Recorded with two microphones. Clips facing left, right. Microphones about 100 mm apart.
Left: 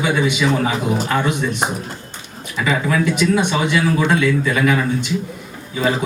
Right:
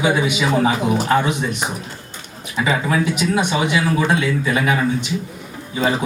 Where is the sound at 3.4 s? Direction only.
15° right (ahead or behind).